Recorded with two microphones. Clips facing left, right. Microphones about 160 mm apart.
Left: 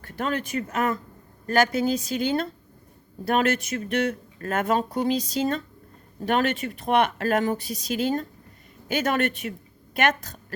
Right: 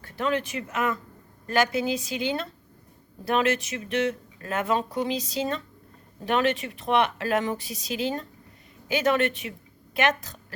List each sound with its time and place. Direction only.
0.0 s a woman's voice: 45° left (ahead or behind)